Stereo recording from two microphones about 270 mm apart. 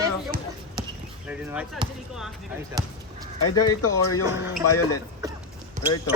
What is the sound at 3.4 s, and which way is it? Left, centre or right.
Speech, left.